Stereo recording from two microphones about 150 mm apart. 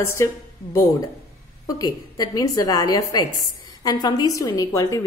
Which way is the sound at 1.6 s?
25° left (ahead or behind).